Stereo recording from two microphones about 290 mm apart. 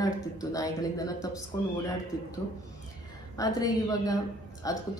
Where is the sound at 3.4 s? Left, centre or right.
Centre.